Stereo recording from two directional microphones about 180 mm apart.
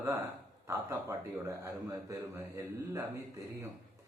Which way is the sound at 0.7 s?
15° right (ahead or behind).